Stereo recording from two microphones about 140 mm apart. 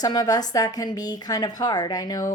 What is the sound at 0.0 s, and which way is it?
A woman's voice, 25° left (ahead or behind).